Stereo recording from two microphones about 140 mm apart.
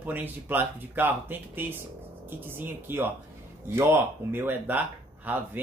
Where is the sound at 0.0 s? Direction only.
15° right (ahead or behind).